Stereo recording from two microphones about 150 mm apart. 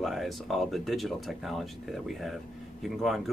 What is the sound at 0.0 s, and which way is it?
Speech, centre (ahead or behind).